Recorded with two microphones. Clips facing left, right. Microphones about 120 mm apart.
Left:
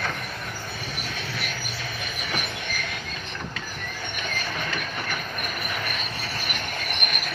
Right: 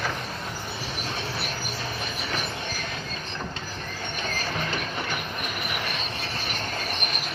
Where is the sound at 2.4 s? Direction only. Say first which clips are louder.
Even; 30° right (ahead or behind).